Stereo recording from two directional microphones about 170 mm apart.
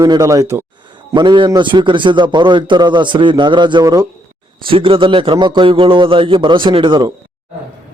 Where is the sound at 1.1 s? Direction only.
30° right (ahead or behind).